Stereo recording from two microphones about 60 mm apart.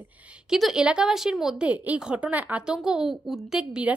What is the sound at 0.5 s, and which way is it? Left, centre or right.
A woman's voice, centre.